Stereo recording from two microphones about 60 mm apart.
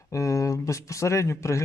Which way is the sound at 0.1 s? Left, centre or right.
Left.